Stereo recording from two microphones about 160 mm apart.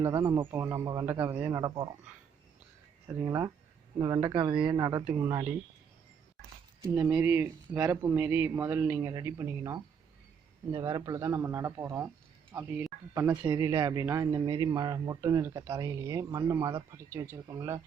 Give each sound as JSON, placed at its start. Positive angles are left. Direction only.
{"t": 0.0, "sound": "speech", "side_deg": -15}
{"t": 3.1, "sound": "speech", "side_deg": -15}
{"t": 5.0, "sound": "speech", "side_deg": -5}
{"t": 6.8, "sound": "speech", "side_deg": -20}